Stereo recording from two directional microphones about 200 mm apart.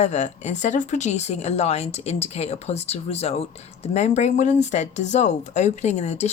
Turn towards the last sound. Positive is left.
turn(degrees=35)  # may be behind; listen again after turning